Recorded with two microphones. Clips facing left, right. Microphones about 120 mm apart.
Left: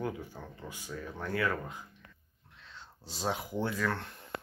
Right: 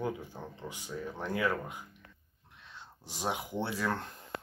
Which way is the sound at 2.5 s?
15° right (ahead or behind).